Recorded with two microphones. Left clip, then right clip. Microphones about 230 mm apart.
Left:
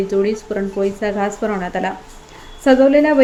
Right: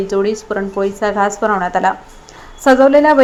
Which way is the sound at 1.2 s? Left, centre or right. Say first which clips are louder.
Right 6 dB; centre.